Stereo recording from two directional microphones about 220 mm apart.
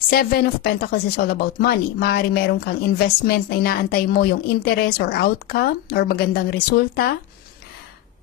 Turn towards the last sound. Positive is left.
turn(degrees=45)  # may be behind; listen again after turning